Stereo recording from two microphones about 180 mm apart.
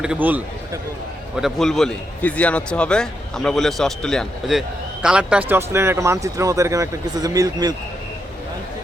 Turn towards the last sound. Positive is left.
turn(degrees=-20)  # may be behind; listen again after turning